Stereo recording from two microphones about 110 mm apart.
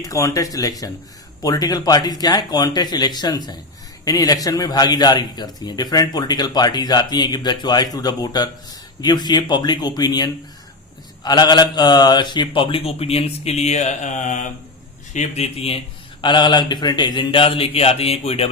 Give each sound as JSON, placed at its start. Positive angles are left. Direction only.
{"t": 0.0, "sound": "a man's voice", "side_deg": 30}
{"t": 16.2, "sound": "speech", "side_deg": 45}